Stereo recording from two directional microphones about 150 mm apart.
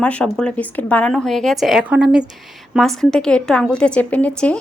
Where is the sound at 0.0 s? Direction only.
5° left (ahead or behind).